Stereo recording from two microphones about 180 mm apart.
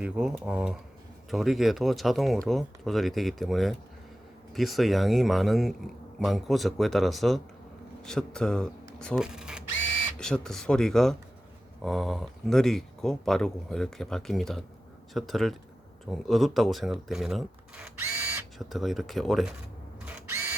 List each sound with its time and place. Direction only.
0.0 s speech: 5° right (ahead or behind)
18.6 s speech: centre (ahead or behind)
20.1 s drill: 10° right (ahead or behind)